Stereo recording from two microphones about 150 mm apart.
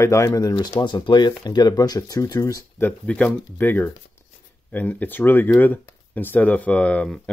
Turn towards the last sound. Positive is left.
turn(degrees=5)  # may be behind; listen again after turning